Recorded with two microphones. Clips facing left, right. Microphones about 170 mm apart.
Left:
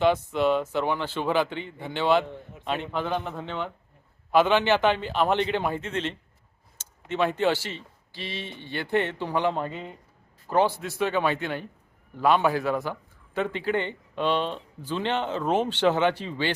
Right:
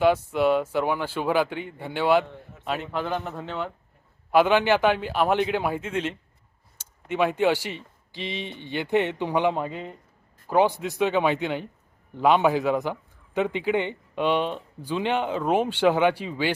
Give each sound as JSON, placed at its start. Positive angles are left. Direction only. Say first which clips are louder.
{"t": 0.0, "sound": "a man's voice", "louder": "right 2 dB", "side_deg": -10}